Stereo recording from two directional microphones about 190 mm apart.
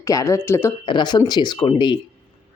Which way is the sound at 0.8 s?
25° left (ahead or behind).